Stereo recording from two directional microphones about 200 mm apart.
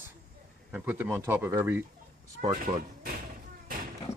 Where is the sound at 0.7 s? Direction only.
10° right (ahead or behind).